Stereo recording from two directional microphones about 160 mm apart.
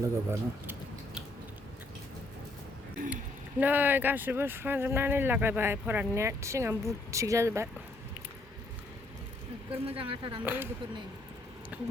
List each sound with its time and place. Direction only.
0.0 s speech: 15° right (ahead or behind)
3.6 s speech: 10° right (ahead or behind)
9.8 s speech: 35° right (ahead or behind)
10.4 s speech: 10° right (ahead or behind)
11.7 s speech: 10° right (ahead or behind)